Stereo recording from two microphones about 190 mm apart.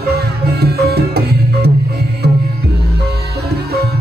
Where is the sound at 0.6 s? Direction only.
55° right (ahead or behind).